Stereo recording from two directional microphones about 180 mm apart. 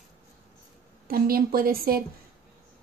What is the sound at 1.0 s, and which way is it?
A woman's voice, 55° right (ahead or behind).